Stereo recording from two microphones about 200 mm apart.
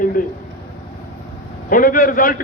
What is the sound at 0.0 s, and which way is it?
Speech, 45° left (ahead or behind).